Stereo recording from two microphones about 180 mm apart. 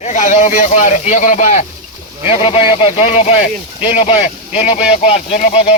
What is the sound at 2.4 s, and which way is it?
Speech, 30° left (ahead or behind).